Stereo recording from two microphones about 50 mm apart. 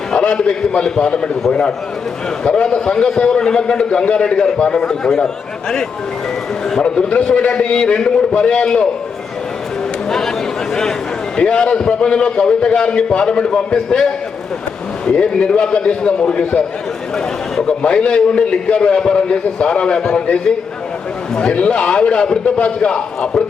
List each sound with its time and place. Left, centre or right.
0.1 s a man's voice: centre
2.4 s a man's voice: centre
10.1 s a sound: centre
11.3 s a man's voice: centre
13.7 s a man's voice: centre